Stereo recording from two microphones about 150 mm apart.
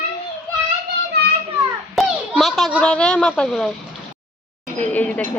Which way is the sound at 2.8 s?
5° left (ahead or behind).